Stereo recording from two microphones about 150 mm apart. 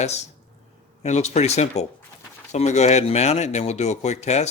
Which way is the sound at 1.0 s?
50° left (ahead or behind).